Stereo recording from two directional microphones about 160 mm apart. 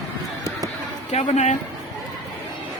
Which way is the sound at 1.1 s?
45° left (ahead or behind).